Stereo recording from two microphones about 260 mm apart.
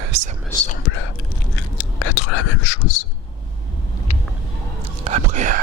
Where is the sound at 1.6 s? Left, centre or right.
Left.